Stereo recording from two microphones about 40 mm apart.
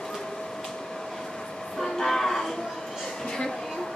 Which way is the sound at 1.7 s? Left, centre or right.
Centre.